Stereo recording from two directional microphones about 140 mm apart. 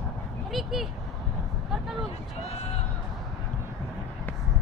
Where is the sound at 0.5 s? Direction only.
Centre (ahead or behind).